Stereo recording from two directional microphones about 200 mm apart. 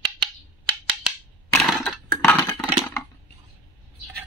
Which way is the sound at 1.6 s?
Centre (ahead or behind).